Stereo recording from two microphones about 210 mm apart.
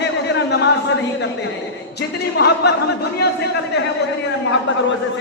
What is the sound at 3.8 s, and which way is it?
Speech, 50° left (ahead or behind).